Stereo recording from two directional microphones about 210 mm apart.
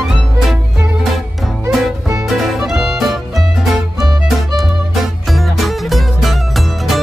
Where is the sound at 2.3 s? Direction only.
Centre (ahead or behind).